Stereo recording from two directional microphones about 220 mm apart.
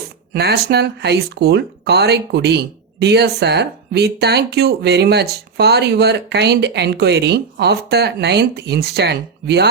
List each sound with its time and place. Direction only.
0.3 s speech: 45° right (ahead or behind)